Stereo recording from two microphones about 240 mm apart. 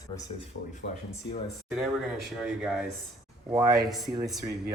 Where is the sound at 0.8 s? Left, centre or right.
Left.